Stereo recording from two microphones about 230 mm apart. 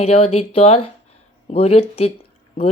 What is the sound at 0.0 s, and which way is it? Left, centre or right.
Speech, left.